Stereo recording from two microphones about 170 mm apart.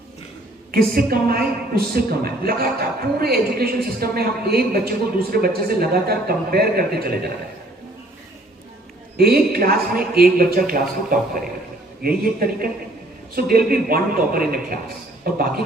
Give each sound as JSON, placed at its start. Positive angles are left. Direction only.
{"t": 0.7, "sound": "a woman's voice", "side_deg": -60}
{"t": 9.1, "sound": "a woman's voice", "side_deg": -65}